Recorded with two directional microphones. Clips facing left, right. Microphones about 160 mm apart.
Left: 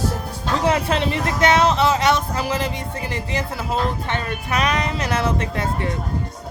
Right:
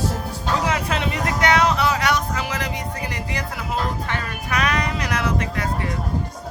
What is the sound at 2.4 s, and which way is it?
Speech, 30° left (ahead or behind).